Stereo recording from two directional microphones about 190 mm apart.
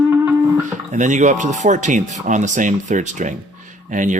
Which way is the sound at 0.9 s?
40° right (ahead or behind).